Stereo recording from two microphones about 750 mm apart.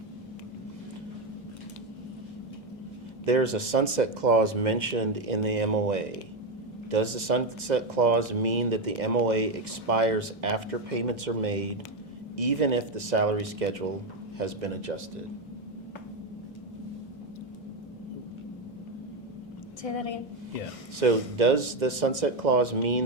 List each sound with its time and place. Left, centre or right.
3.2 s speech: right
19.8 s a woman's voice: left
21.0 s speech: right